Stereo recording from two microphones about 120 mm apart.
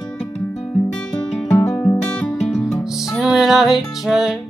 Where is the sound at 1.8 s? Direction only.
15° left (ahead or behind).